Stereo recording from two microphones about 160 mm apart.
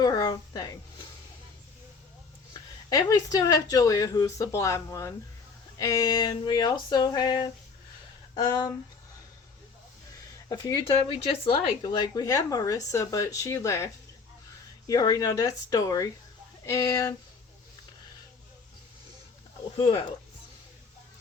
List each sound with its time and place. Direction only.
0.0 s a woman's voice: 25° left (ahead or behind)
2.5 s speech: 25° left (ahead or behind)
10.5 s speech: 30° left (ahead or behind)
19.7 s speech: 30° left (ahead or behind)